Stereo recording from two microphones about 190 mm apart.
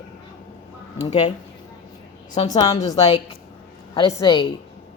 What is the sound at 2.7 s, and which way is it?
A woman's voice, 35° left (ahead or behind).